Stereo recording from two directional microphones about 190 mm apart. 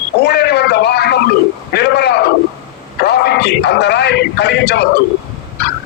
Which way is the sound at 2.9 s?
55° left (ahead or behind).